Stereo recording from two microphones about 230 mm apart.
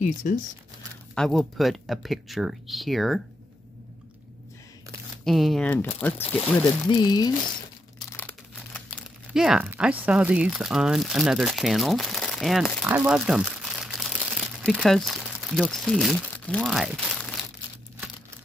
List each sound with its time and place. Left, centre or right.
0.2 s speech: left
1.1 s speech: centre
5.2 s speech: centre
6.9 s speech: centre
8.2 s crumpling: centre
9.3 s speech: centre